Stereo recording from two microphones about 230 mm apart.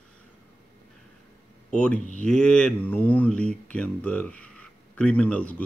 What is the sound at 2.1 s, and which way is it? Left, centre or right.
Speech, centre.